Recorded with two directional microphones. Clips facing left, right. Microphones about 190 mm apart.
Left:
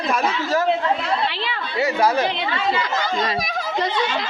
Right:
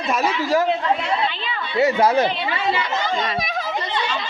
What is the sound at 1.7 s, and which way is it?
Speech, 20° right (ahead or behind).